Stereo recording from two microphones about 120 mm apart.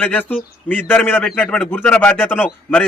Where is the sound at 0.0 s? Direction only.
15° left (ahead or behind).